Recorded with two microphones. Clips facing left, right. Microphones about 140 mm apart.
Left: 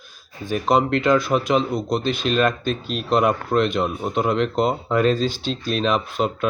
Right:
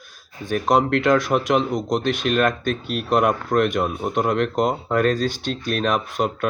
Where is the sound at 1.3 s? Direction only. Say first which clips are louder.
Even; 15° right (ahead or behind).